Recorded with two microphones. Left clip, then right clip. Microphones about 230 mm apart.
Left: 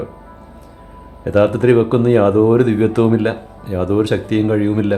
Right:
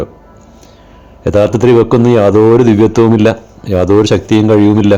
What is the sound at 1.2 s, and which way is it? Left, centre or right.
Speech, right.